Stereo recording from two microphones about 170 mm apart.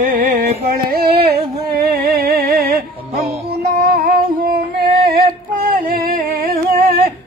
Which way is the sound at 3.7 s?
60° right (ahead or behind).